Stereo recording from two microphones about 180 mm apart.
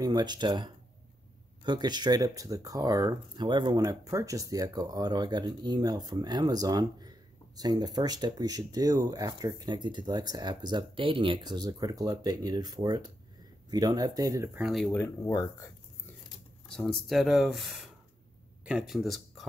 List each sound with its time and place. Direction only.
0.0 s speech: 20° right (ahead or behind)
14.9 s speech: 10° left (ahead or behind)
16.6 s speech: centre (ahead or behind)